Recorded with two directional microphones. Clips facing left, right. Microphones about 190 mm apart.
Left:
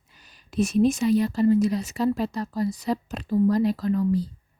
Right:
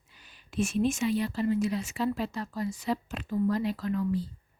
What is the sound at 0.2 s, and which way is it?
A woman's voice, 40° left (ahead or behind).